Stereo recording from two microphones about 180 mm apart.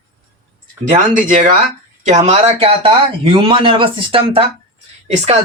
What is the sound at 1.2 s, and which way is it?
Speech, 45° right (ahead or behind).